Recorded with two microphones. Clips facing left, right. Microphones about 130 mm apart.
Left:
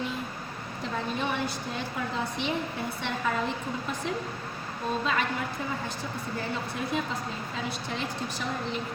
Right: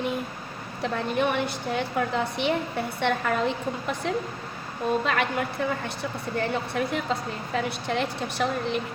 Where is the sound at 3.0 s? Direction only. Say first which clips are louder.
Right 6 dB; 65° right (ahead or behind).